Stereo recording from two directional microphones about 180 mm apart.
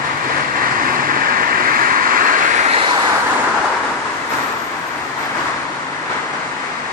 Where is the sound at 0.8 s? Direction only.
55° right (ahead or behind).